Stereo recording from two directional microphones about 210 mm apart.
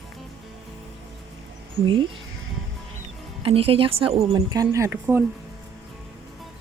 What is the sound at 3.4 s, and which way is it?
A woman's voice, 25° right (ahead or behind).